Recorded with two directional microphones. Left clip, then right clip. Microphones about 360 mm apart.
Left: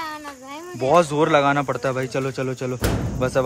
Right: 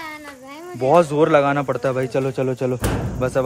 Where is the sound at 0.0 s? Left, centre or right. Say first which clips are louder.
Left 2 dB; centre.